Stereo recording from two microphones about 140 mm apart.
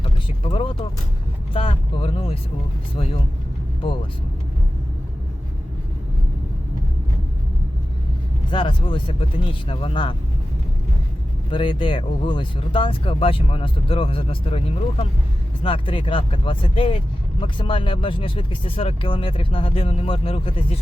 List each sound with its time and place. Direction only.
0.0 s speech: 40° left (ahead or behind)
8.4 s speech: 35° left (ahead or behind)
11.5 s speech: 35° left (ahead or behind)